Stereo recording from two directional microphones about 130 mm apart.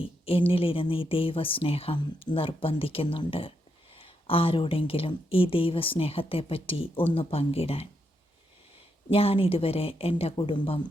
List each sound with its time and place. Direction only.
0.0 s speech: 45° left (ahead or behind)
9.0 s speech: 45° left (ahead or behind)